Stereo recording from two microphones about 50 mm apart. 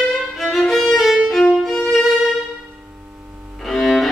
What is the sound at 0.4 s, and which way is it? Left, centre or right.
Violin, centre.